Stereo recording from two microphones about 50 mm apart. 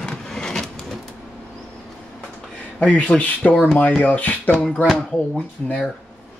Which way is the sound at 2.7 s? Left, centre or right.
Left.